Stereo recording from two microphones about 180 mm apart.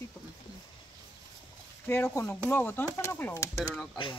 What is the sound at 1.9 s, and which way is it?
Speech, 10° left (ahead or behind).